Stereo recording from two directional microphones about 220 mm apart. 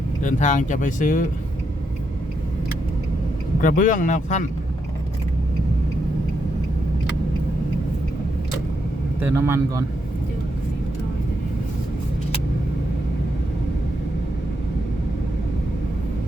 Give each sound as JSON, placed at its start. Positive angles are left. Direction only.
{"t": 0.2, "sound": "speech", "side_deg": 35}
{"t": 3.6, "sound": "speech", "side_deg": 35}
{"t": 9.3, "sound": "speech", "side_deg": -10}